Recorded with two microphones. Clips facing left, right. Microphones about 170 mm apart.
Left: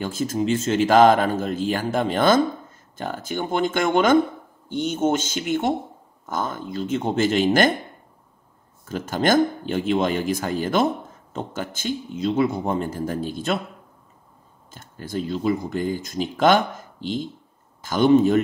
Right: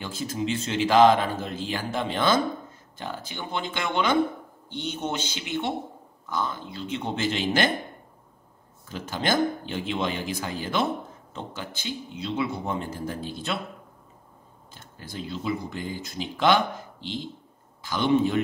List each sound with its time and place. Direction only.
0.0 s speech: 45° left (ahead or behind)
8.8 s speech: 50° left (ahead or behind)
14.7 s speech: 45° left (ahead or behind)